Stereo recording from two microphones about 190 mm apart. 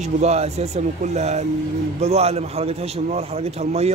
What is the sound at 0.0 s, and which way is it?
Speech, 35° right (ahead or behind).